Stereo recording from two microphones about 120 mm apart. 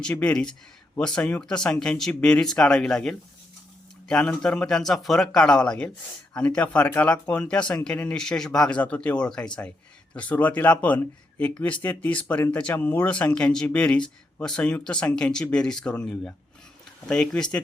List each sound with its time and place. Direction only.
0.0 s speech: 10° left (ahead or behind)